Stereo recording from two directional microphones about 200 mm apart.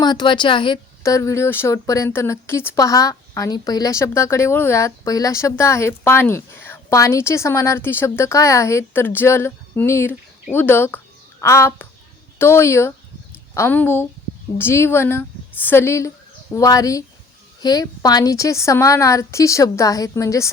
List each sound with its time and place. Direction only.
0.0 s a woman's voice: 20° left (ahead or behind)